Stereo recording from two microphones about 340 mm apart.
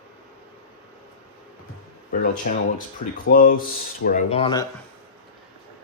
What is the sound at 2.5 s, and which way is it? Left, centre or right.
Speech, left.